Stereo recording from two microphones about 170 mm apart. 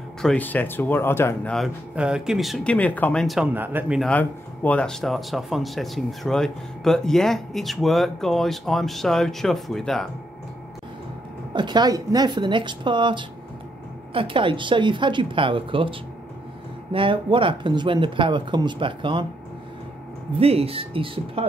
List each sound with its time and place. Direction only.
0.2 s speech: 5° left (ahead or behind)
1.5 s speech: centre (ahead or behind)
3.5 s speech: 10° right (ahead or behind)
4.0 s speech: 10° left (ahead or behind)
11.5 s speech: 25° right (ahead or behind)
20.3 s speech: 35° right (ahead or behind)